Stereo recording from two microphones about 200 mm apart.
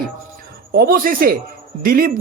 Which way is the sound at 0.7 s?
50° right (ahead or behind).